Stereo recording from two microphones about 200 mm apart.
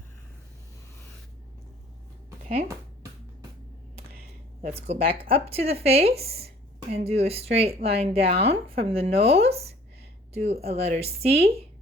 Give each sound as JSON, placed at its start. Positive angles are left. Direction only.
{"t": 4.9, "sound": "speech", "side_deg": -30}